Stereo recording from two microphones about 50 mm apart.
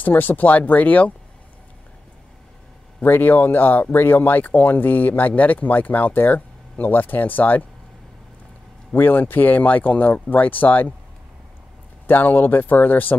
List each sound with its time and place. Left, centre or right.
0.0 s speech: left
3.0 s speech: left
8.9 s speech: left
12.1 s speech: left